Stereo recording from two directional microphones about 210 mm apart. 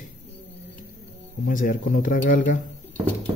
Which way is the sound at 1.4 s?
40° left (ahead or behind).